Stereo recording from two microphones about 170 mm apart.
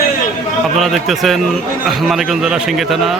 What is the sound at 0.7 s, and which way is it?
Speech, centre (ahead or behind).